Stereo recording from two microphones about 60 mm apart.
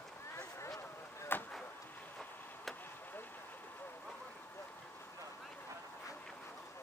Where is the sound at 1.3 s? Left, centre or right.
Left.